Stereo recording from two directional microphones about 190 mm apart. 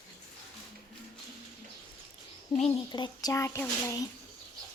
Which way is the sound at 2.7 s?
20° left (ahead or behind).